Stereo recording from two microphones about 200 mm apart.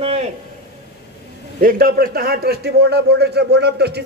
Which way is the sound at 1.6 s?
50° right (ahead or behind).